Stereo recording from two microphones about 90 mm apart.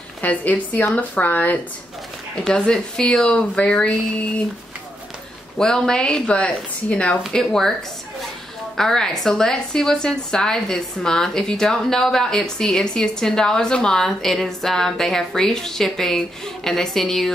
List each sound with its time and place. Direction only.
0.2 s speech: 15° left (ahead or behind)
2.4 s speech: 5° left (ahead or behind)
5.6 s a woman's voice: 5° left (ahead or behind)
8.7 s a woman's voice: 5° left (ahead or behind)